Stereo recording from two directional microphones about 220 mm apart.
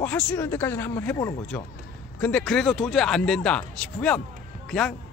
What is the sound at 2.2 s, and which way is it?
Speech, 5° left (ahead or behind).